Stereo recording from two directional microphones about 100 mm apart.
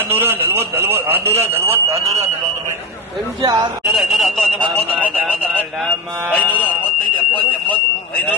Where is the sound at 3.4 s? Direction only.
45° right (ahead or behind).